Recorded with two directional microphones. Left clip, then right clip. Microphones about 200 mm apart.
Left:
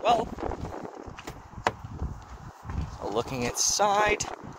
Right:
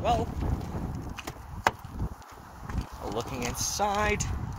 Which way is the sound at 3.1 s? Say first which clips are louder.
Left 4 dB; 50° left (ahead or behind).